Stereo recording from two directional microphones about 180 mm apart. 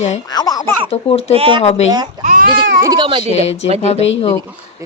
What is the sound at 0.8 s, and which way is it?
Speech, 35° left (ahead or behind).